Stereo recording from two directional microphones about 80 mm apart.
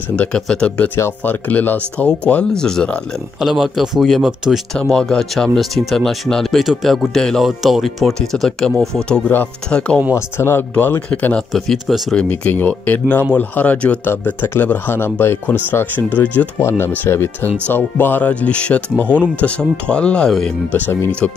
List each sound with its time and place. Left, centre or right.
0.1 s speech: centre
3.3 s speech: centre
4.8 s speech: centre
10.1 s speech: left
11.5 s speech: centre
12.3 s speech: left
20.7 s speech: left